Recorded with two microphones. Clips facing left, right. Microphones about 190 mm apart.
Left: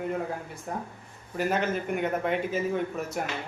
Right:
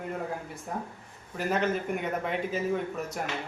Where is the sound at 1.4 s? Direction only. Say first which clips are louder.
Left 1 dB; centre (ahead or behind).